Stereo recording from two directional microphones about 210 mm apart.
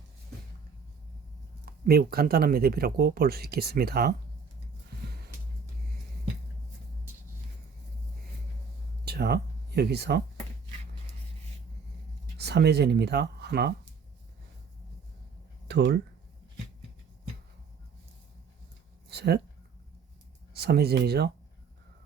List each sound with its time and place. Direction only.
1.8 s speech: 45° right (ahead or behind)
4.9 s music: 50° right (ahead or behind)
9.0 s speech: 50° right (ahead or behind)
12.4 s speech: 50° right (ahead or behind)
15.6 s speech: 50° right (ahead or behind)
19.0 s a sound: 50° right (ahead or behind)
20.5 s speech: 50° right (ahead or behind)